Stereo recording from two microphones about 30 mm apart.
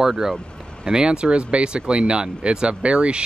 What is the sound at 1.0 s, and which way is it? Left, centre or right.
Speech, right.